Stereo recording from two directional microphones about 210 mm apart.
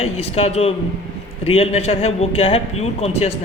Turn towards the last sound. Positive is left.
turn(degrees=30)  # may be behind; listen again after turning